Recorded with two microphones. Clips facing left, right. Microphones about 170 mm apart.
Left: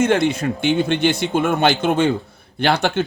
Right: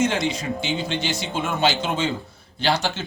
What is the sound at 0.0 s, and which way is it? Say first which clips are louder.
Speech: left 6 dB; 60° left (ahead or behind).